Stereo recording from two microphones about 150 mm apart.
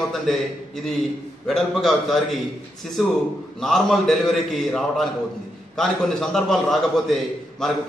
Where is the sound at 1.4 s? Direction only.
Centre (ahead or behind).